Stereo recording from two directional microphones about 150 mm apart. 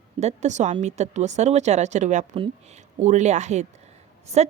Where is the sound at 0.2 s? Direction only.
50° right (ahead or behind).